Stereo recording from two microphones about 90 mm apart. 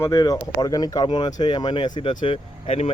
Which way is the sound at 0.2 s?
45° left (ahead or behind).